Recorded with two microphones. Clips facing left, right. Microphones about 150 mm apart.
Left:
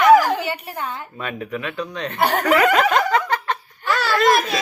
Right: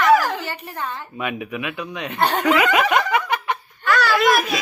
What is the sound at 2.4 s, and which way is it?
Snicker, 10° right (ahead or behind).